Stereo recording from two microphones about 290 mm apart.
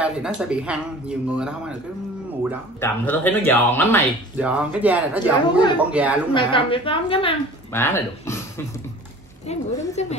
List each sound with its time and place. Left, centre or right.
0.0 s speech: centre
2.8 s speech: centre
4.4 s speech: centre
6.3 s speech: centre
9.5 s a woman's voice: left